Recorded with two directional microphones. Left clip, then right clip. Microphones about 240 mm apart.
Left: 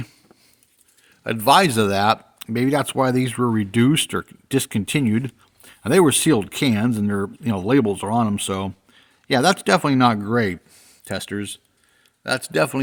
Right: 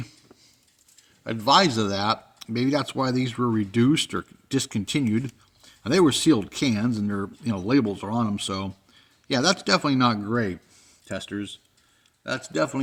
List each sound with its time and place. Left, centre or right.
1.2 s a man's voice: left